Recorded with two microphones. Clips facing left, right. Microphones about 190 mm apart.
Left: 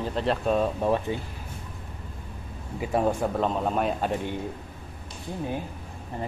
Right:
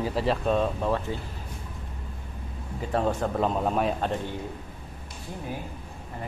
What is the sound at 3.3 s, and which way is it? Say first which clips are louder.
Speech: even; centre (ahead or behind).